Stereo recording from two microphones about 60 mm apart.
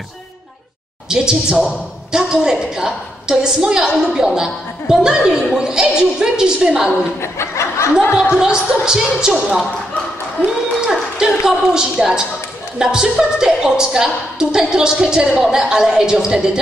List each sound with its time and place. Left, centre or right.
1.0 s a woman's voice: centre
7.2 s laughter: left
8.4 s a woman's voice: centre
10.4 s a sound: centre
12.7 s a woman's voice: centre